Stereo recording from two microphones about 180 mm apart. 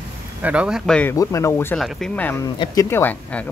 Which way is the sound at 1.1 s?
15° left (ahead or behind).